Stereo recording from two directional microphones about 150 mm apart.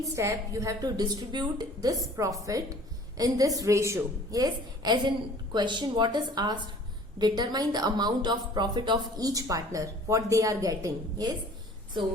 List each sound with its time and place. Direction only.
0.0 s a woman's voice: 20° right (ahead or behind)